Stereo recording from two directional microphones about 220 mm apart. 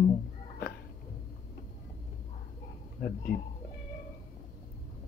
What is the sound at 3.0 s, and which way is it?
Speech, 40° left (ahead or behind).